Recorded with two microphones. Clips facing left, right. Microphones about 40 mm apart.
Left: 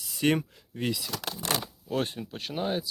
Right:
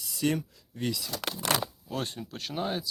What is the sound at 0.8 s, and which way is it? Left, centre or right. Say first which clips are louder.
Speech: left 1 dB; centre.